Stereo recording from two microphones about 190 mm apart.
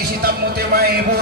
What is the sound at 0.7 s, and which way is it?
Speech, 55° right (ahead or behind).